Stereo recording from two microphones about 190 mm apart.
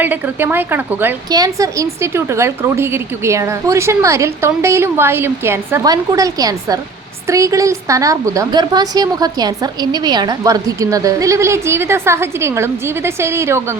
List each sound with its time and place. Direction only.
0.0 s a woman's voice: 10° right (ahead or behind)